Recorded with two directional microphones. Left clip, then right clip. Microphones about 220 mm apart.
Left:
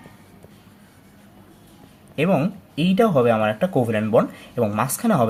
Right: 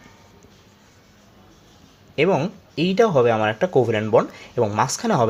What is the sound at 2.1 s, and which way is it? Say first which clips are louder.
Speech: right 2 dB; 25° right (ahead or behind).